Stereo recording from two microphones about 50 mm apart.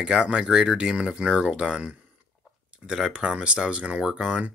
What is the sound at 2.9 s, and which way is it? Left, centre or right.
Speech, centre.